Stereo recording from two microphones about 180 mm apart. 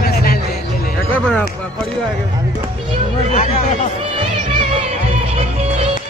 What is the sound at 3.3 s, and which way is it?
Chatter, 35° left (ahead or behind).